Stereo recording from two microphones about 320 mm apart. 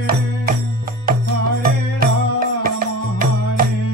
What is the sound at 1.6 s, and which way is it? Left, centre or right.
Music, right.